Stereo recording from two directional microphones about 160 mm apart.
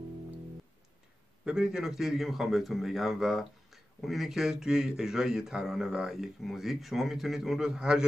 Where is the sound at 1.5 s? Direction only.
5° right (ahead or behind).